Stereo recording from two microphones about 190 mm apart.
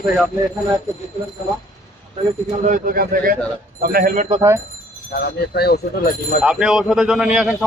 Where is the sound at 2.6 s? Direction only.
45° right (ahead or behind).